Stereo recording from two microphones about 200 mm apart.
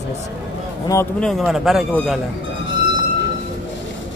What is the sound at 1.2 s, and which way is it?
Speech, centre (ahead or behind).